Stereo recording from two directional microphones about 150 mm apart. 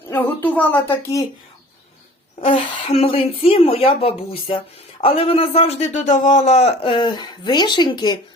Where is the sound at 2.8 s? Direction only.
40° left (ahead or behind).